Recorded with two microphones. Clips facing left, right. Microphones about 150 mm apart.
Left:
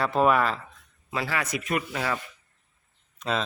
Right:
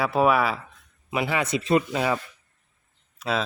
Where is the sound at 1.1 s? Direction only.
20° right (ahead or behind).